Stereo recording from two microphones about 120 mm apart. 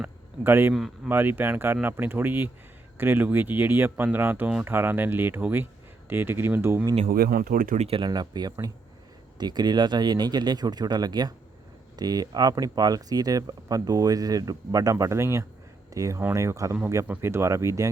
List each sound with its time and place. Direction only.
0.0 s a sound: 20° right (ahead or behind)
0.7 s speech: centre (ahead or behind)
1.0 s speech: 15° right (ahead or behind)
7.8 s speech: 50° right (ahead or behind); by 17.8 s 25° right (ahead or behind)